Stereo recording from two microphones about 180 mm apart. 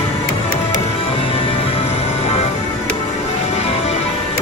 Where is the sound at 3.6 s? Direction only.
35° left (ahead or behind).